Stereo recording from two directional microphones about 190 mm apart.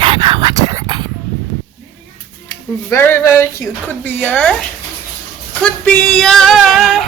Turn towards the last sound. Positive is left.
turn(degrees=0)  # may be behind; listen again after turning